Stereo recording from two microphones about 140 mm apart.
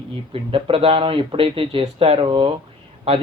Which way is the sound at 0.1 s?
40° right (ahead or behind).